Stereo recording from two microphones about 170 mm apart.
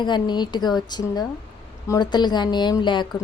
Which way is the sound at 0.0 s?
25° left (ahead or behind).